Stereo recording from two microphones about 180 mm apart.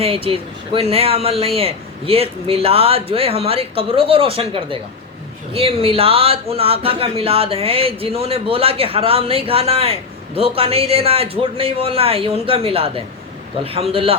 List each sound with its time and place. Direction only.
0.0 s speech: 30° right (ahead or behind)